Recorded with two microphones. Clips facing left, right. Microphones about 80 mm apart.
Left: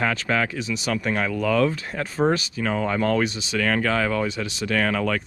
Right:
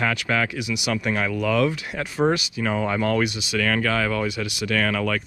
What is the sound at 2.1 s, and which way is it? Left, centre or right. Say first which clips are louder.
Speech: even; centre.